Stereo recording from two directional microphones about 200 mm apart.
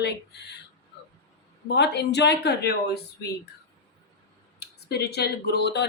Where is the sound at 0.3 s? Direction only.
55° left (ahead or behind).